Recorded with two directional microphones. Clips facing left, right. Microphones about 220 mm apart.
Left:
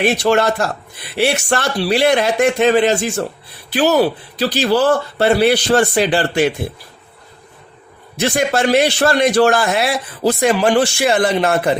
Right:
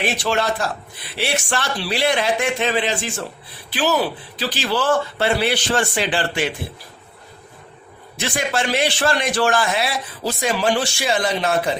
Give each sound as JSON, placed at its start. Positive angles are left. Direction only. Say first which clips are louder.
{"t": 0.0, "sound": "a man's voice", "louder": "left 7 dB", "side_deg": 45}
{"t": 8.2, "sound": "a man's voice", "louder": "left 7 dB", "side_deg": 45}